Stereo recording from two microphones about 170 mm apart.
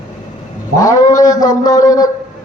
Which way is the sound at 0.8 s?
20° left (ahead or behind).